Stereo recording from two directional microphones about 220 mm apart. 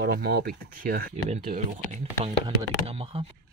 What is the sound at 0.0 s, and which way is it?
Speech, 45° right (ahead or behind).